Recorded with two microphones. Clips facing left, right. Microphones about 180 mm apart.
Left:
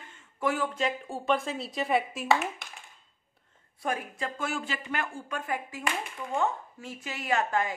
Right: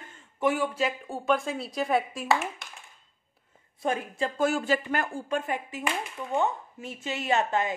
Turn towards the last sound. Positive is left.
turn(degrees=-25)  # may be behind; listen again after turning